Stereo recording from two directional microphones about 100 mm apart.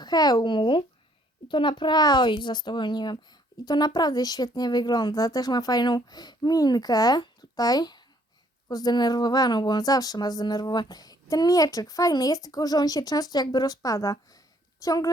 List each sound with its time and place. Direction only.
0.0 s a child's voice: 45° left (ahead or behind)